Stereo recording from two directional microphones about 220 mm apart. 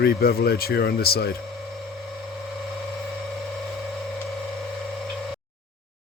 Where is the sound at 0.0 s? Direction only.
45° left (ahead or behind).